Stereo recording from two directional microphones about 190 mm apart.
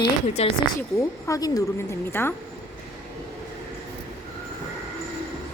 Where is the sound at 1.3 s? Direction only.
20° left (ahead or behind).